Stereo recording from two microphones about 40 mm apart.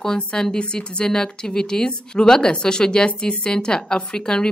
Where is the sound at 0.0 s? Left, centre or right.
Centre.